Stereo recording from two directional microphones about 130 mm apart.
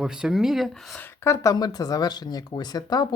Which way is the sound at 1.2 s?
25° left (ahead or behind).